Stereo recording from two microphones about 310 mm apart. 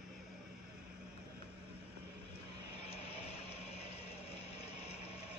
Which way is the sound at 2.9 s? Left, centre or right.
Centre.